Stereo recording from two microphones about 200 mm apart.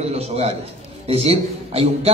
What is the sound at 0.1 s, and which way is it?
A man's voice, 30° right (ahead or behind).